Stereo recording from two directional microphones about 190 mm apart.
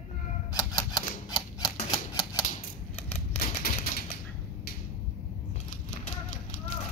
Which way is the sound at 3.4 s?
50° left (ahead or behind).